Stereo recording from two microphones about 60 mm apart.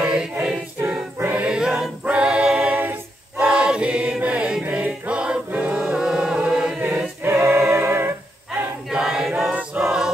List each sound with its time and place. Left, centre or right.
0.0 s choir: centre
2.0 s a capella: right
4.6 s music: right
6.8 s choir: right
7.2 s a capella: right
8.9 s choir: centre